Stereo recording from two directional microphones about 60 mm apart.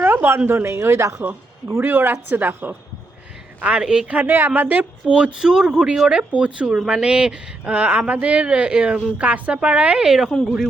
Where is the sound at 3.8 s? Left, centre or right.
Centre.